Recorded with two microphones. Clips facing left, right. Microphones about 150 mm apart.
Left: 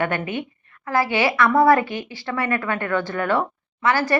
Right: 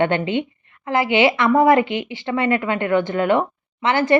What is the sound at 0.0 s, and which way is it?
Speech, 25° right (ahead or behind).